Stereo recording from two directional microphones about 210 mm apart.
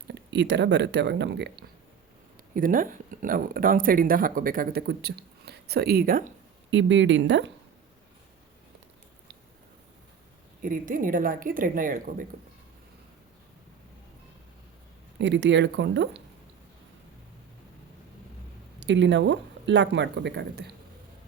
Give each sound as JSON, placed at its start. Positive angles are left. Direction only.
{"t": 0.1, "sound": "speech", "side_deg": -55}
{"t": 2.6, "sound": "speech", "side_deg": -40}
{"t": 6.7, "sound": "speech", "side_deg": -60}
{"t": 10.6, "sound": "speech", "side_deg": -40}
{"t": 15.2, "sound": "speech", "side_deg": -55}
{"t": 18.8, "sound": "speech", "side_deg": -60}